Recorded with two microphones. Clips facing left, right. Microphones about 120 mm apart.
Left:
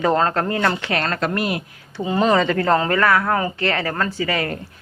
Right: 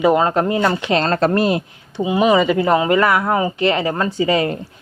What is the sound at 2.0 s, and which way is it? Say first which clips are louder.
Speech: right 3 dB; 10° right (ahead or behind).